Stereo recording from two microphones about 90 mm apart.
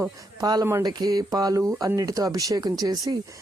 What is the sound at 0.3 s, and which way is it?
Speech, 45° right (ahead or behind).